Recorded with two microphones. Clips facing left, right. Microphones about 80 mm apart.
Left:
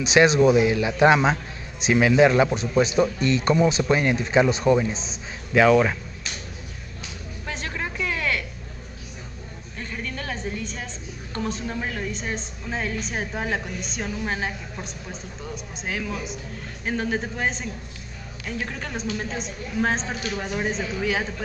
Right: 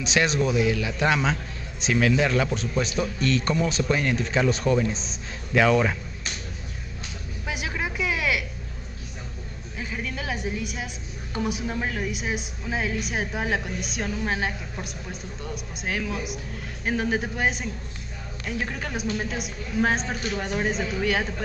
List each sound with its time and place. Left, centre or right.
0.4 s a man's voice: left
2.5 s speech: centre
3.9 s a man's voice: centre
4.9 s a woman's voice: centre
7.4 s a sound: centre
9.8 s a sound: centre
11.7 s a woman's voice: centre